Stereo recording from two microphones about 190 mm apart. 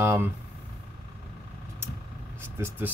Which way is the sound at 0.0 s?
10° right (ahead or behind).